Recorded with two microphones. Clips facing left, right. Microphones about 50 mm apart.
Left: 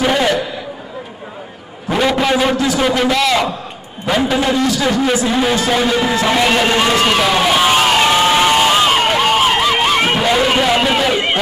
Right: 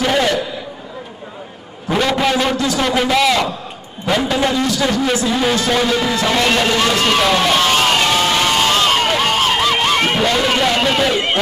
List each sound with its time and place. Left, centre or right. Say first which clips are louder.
0.0 s a sound: left 1 dB; centre
1.9 s a man's voice: left 1 dB; centre
2.5 s speech: left 2 dB; centre
2.9 s a man's voice: even; centre
4.0 s speech: left 1 dB; centre
7.2 s crowd: left 1 dB; centre